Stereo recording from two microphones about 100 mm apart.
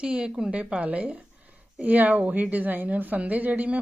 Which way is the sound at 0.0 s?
10° right (ahead or behind).